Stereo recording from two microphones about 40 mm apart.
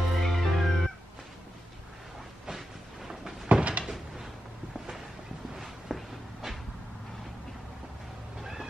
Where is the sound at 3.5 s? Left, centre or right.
Right.